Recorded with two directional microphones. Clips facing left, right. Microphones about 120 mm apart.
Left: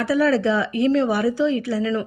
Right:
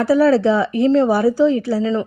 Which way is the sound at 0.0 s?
35° right (ahead or behind).